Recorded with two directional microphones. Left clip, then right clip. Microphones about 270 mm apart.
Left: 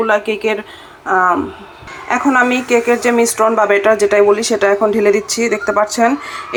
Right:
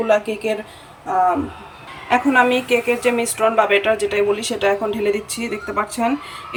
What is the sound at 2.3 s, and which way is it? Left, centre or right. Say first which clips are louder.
Speech: left 4 dB; left.